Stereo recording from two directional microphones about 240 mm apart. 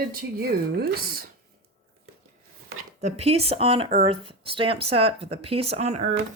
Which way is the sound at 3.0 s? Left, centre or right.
Right.